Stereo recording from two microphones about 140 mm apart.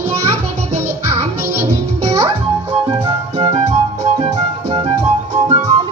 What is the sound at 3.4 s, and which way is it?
Music, 50° right (ahead or behind).